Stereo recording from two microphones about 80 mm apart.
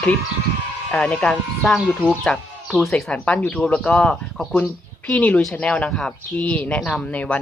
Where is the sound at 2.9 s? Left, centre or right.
Centre.